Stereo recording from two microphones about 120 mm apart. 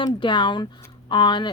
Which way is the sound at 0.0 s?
40° left (ahead or behind).